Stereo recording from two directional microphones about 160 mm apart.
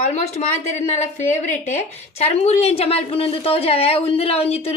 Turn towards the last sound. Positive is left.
turn(degrees=40)  # may be behind; listen again after turning